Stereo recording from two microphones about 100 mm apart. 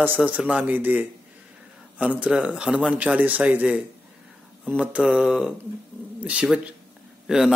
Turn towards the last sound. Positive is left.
turn(degrees=-5)  # may be behind; listen again after turning